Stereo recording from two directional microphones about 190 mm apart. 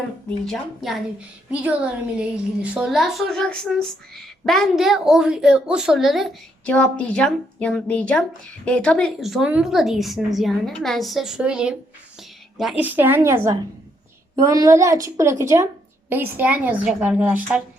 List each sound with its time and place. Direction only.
0.3 s a woman's voice: centre (ahead or behind)